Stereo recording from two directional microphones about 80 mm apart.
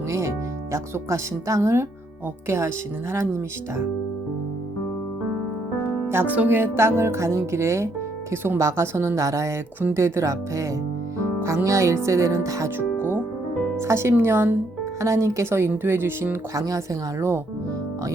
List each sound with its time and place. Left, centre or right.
0.1 s speech: right
6.1 s speech: right
13.0 s music: right
13.7 s speech: right
15.0 s speech: right
16.6 s speech: right